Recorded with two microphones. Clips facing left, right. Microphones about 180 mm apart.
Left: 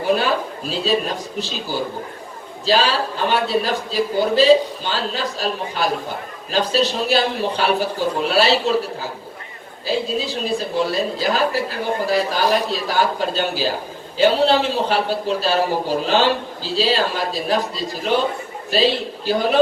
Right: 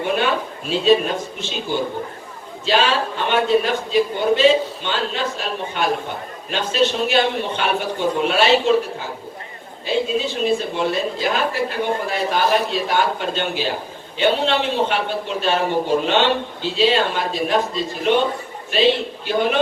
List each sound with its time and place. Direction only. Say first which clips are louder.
0.7 s a woman's voice: right 5 dB; 35° left (ahead or behind)
2.6 s a woman's voice: even; 35° left (ahead or behind)